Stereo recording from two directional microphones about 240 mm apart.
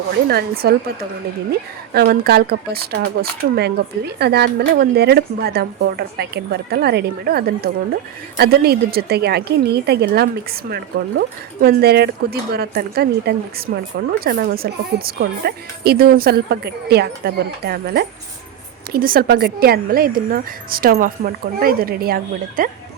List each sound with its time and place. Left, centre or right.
0.3 s speech: right
1.9 s speech: right